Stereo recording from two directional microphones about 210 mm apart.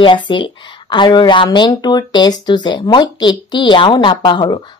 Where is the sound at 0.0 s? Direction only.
20° left (ahead or behind).